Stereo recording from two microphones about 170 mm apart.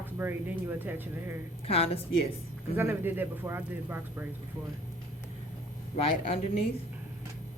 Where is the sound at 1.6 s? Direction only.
35° left (ahead or behind).